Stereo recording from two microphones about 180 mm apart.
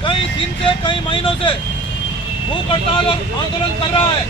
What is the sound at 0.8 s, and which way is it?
Speech, 30° left (ahead or behind).